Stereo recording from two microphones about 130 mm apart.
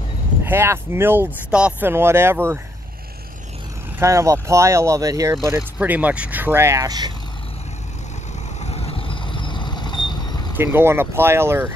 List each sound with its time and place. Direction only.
0.4 s speech: 20° right (ahead or behind)
4.0 s speech: 25° right (ahead or behind)
5.8 s speech: 10° right (ahead or behind); by 7.1 s 30° right (ahead or behind)
8.6 s vehicle: 50° left (ahead or behind)
10.5 s speech: 15° right (ahead or behind)